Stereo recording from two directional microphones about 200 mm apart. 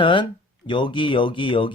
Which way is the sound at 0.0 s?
25° left (ahead or behind).